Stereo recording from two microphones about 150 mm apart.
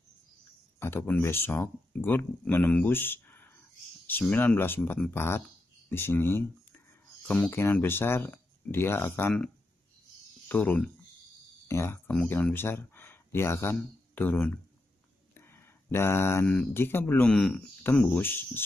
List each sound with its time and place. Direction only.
0.7 s speech: 15° left (ahead or behind)
10.5 s speech: 10° left (ahead or behind)